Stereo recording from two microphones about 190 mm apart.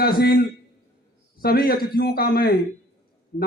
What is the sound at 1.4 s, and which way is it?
Speech, 50° left (ahead or behind).